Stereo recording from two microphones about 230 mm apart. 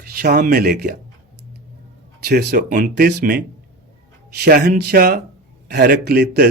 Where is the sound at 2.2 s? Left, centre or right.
Right.